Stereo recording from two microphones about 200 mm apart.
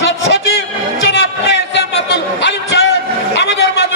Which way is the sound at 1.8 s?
65° left (ahead or behind).